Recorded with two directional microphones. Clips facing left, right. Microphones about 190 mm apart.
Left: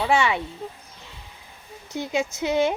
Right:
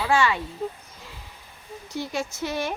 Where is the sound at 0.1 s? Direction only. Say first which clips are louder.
Even; 20° left (ahead or behind).